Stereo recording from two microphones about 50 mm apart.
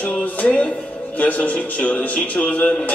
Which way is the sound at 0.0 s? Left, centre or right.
Left.